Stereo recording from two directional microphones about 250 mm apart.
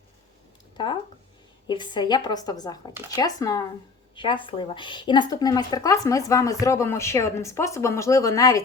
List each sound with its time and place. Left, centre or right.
0.8 s speech: centre